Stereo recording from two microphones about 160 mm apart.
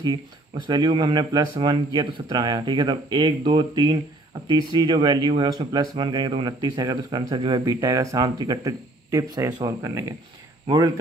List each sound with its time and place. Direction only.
0.7 s speech: 25° right (ahead or behind)